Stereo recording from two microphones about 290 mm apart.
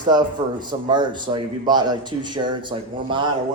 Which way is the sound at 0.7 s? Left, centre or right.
Centre.